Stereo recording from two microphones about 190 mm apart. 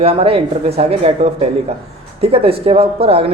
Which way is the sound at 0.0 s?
30° right (ahead or behind).